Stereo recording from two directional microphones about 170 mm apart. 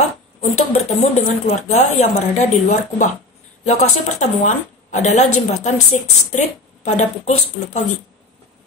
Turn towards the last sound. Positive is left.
turn(degrees=45)  # may be behind; listen again after turning